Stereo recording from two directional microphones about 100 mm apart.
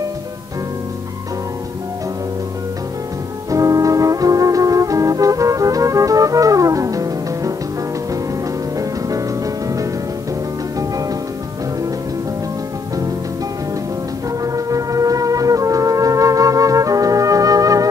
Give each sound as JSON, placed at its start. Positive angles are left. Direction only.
{"t": 3.4, "sound": "music", "side_deg": -35}
{"t": 14.4, "sound": "music", "side_deg": -35}